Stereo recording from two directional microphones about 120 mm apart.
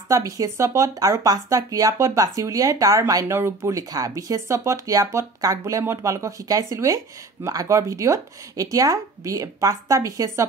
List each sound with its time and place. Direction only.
0.1 s speech: 25° right (ahead or behind)